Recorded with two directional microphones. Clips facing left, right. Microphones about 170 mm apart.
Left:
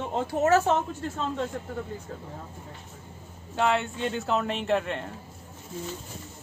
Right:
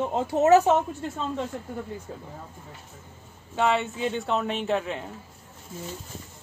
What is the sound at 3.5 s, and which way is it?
Speech, centre (ahead or behind).